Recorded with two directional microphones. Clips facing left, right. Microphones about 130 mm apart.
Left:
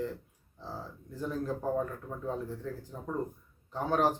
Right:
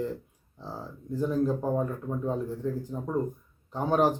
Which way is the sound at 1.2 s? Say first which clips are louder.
Right 7 dB; 20° right (ahead or behind).